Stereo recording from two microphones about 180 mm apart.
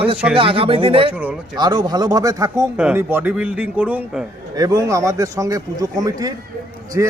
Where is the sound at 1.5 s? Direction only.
25° right (ahead or behind); by 4.3 s 5° right (ahead or behind).